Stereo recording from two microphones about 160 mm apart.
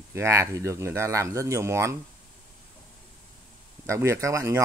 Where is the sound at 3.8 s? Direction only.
20° right (ahead or behind).